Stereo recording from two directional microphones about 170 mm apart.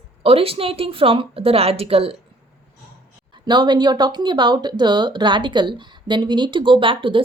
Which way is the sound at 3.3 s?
25° right (ahead or behind).